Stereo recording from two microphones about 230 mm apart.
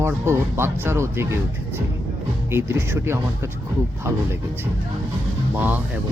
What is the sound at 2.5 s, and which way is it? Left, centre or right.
Speech, centre.